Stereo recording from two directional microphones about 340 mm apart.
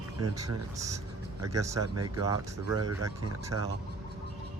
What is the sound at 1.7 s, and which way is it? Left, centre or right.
Speech, right.